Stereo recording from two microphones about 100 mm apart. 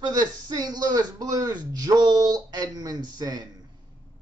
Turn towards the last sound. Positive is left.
turn(degrees=-40)  # may be behind; listen again after turning